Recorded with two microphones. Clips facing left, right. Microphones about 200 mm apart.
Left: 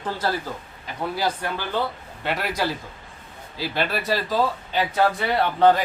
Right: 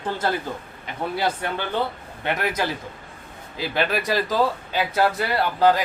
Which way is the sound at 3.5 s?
15° right (ahead or behind).